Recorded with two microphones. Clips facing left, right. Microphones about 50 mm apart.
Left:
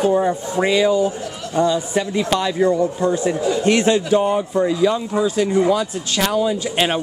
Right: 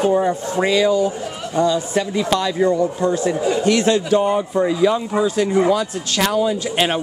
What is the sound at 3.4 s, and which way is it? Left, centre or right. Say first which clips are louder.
Speech: right 1 dB; right.